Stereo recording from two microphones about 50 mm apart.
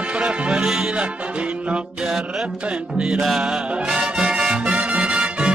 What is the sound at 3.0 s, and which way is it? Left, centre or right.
Music, centre.